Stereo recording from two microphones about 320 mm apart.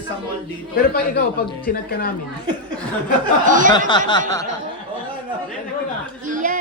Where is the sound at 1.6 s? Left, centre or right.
Left.